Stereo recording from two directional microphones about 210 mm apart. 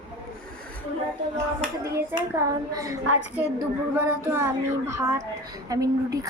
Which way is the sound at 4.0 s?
10° right (ahead or behind).